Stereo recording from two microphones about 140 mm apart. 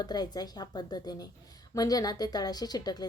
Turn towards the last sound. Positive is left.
turn(degrees=30)  # may be behind; listen again after turning